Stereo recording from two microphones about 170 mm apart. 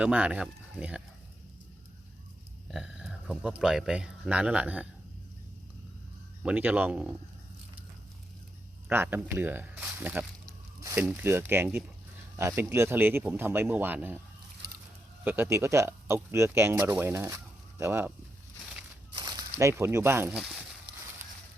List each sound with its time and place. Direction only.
0.0 s speech: 5° right (ahead or behind)
2.6 s a sound: 5° right (ahead or behind)
3.4 s speech: centre (ahead or behind)
6.4 s speech: 10° right (ahead or behind)
8.9 s speech: 10° right (ahead or behind)
15.2 s speech: 10° right (ahead or behind)
19.1 s a sound: 25° right (ahead or behind)
19.5 s speech: 15° right (ahead or behind)